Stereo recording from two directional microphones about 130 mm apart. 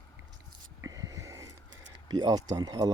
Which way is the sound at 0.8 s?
30° right (ahead or behind).